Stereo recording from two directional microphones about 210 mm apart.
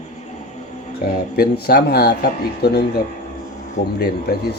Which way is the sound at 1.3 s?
45° left (ahead or behind).